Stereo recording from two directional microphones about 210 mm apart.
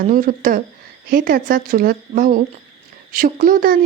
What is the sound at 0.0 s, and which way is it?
Speech, 40° right (ahead or behind).